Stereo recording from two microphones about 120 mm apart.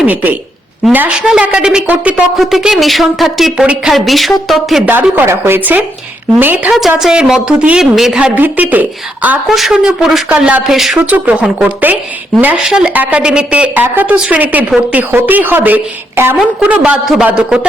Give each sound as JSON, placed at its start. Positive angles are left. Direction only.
{"t": 0.0, "sound": "a woman's voice", "side_deg": -10}
{"t": 4.9, "sound": "a woman's voice", "side_deg": -15}
{"t": 8.4, "sound": "a woman's voice", "side_deg": -15}
{"t": 9.5, "sound": "a woman's voice", "side_deg": 0}